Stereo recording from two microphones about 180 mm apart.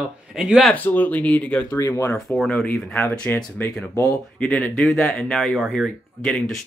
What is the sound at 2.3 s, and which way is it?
Speech, 5° left (ahead or behind).